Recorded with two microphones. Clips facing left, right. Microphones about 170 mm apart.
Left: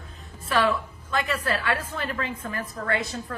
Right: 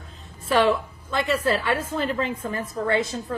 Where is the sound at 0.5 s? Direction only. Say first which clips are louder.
Right 4 dB; 25° right (ahead or behind).